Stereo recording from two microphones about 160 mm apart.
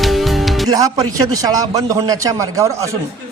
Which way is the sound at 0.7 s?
25° right (ahead or behind).